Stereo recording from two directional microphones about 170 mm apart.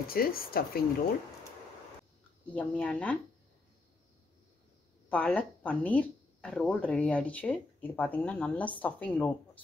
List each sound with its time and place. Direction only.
0.1 s speech: 60° left (ahead or behind)
2.5 s speech: 5° left (ahead or behind)
5.1 s speech: 10° left (ahead or behind)